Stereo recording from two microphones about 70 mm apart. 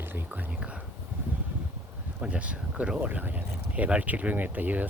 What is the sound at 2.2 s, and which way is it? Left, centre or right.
Speech, centre.